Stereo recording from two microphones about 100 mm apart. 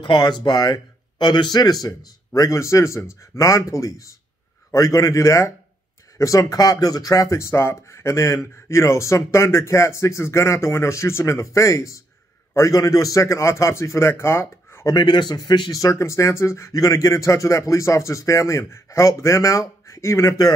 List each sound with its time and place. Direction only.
0.0 s speech: 45° left (ahead or behind); by 14.9 s 25° left (ahead or behind)
14.9 s speech: 50° left (ahead or behind); by 20.3 s 30° left (ahead or behind)